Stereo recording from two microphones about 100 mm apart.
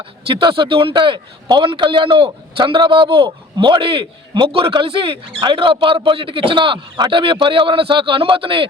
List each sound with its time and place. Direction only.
0.3 s a man's voice: 55° right (ahead or behind)